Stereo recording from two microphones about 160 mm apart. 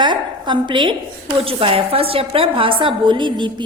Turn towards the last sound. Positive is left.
turn(degrees=-30)  # may be behind; listen again after turning